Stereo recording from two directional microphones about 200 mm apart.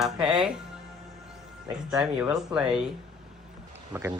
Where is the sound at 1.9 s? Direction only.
5° right (ahead or behind).